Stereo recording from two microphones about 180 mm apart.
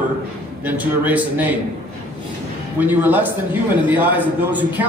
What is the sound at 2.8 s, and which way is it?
A man's voice, 10° right (ahead or behind).